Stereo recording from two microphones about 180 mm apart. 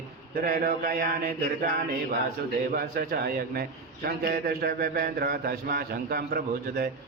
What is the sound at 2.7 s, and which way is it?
Speech, 60° right (ahead or behind).